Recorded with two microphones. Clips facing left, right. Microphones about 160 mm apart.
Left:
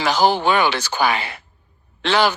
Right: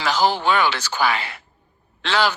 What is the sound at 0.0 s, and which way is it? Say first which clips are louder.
A man's voice: left 3 dB; 15° left (ahead or behind).